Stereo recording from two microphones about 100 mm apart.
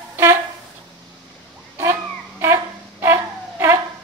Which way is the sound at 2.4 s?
25° right (ahead or behind).